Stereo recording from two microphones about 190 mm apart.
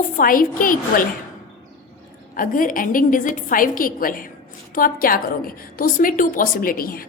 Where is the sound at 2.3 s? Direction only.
45° left (ahead or behind).